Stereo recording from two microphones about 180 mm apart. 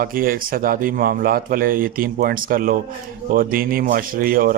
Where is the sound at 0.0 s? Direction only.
55° right (ahead or behind).